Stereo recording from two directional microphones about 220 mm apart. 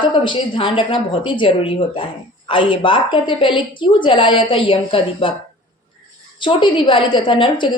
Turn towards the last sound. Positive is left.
turn(degrees=20)  # may be behind; listen again after turning